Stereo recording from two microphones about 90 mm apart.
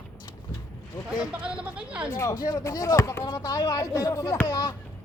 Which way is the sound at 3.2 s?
50° left (ahead or behind).